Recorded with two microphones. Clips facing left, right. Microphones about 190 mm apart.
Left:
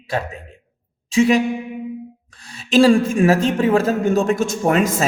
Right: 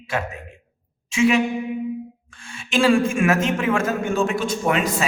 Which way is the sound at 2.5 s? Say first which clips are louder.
Left 5 dB; 35° left (ahead or behind).